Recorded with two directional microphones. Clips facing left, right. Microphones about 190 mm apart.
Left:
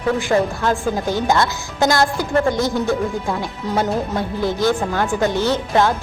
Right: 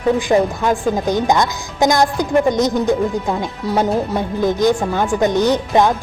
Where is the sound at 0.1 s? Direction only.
15° right (ahead or behind).